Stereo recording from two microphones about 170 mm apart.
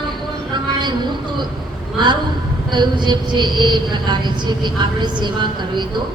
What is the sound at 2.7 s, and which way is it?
A woman's voice, 25° right (ahead or behind).